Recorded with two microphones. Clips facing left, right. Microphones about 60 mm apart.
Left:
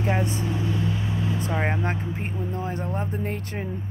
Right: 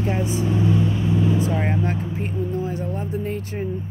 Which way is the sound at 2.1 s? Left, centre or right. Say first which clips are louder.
Right 5 dB; left.